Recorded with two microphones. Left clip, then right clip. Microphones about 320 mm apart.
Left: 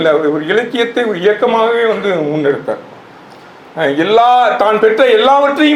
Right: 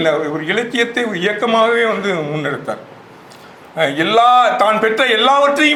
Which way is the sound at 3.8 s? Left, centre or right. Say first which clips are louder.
Left 2 dB; right.